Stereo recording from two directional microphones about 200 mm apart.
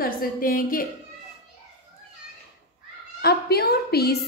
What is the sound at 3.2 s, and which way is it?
Speech, 55° left (ahead or behind).